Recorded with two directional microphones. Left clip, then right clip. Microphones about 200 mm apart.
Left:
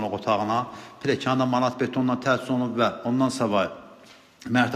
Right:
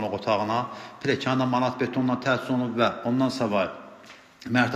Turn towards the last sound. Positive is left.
turn(degrees=10)  # may be behind; listen again after turning